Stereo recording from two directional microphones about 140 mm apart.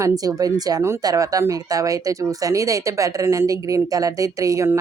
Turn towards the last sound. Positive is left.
turn(degrees=-20)  # may be behind; listen again after turning